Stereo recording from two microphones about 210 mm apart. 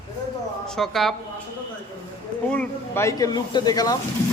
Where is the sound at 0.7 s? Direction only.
Centre (ahead or behind).